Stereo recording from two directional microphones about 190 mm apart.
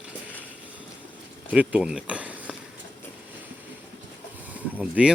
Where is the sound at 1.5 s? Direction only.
5° right (ahead or behind).